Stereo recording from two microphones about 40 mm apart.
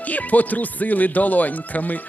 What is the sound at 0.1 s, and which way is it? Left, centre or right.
Speech, left.